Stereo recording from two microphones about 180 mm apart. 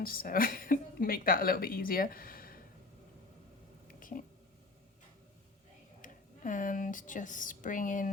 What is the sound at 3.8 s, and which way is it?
Whispering, 50° left (ahead or behind).